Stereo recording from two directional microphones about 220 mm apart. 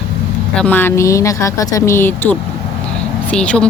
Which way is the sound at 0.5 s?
5° left (ahead or behind).